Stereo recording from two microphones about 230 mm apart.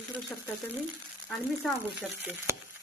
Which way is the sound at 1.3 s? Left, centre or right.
Centre.